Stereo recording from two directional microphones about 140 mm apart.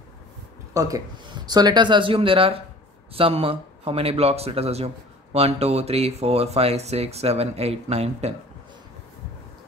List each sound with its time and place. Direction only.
0.7 s speech: 25° right (ahead or behind); by 8.4 s 50° right (ahead or behind)